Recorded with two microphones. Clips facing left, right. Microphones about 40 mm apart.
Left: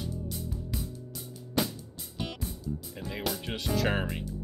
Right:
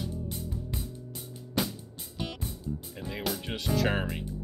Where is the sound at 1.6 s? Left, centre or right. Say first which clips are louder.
Left 1 dB; centre.